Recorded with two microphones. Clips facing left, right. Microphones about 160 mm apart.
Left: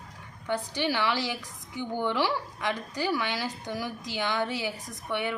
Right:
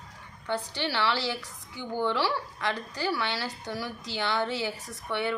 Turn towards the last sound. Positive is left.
turn(degrees=15)  # may be behind; listen again after turning